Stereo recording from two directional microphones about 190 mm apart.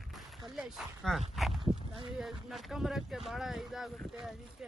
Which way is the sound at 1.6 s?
25° right (ahead or behind).